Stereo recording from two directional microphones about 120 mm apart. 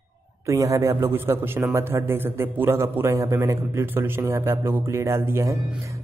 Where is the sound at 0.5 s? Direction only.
25° right (ahead or behind).